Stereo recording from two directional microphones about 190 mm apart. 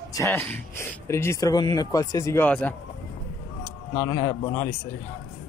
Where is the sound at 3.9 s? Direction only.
15° left (ahead or behind).